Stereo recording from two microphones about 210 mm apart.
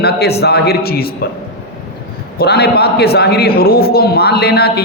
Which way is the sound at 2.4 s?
50° left (ahead or behind).